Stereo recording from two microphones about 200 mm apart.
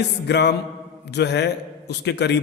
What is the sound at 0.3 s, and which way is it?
A man's voice, 55° left (ahead or behind).